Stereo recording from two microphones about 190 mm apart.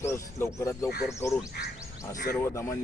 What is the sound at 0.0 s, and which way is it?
Speech, 15° left (ahead or behind).